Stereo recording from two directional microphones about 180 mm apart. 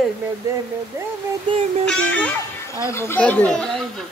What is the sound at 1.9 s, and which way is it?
Speech, 5° left (ahead or behind).